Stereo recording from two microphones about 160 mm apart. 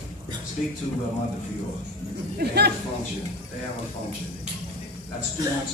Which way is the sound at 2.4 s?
90° right.